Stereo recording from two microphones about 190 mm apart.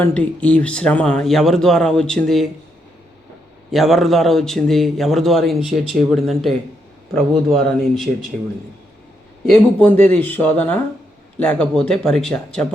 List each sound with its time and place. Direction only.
0.0 s speech: 5° left (ahead or behind)
3.7 s speech: centre (ahead or behind)
9.5 s speech: 10° left (ahead or behind)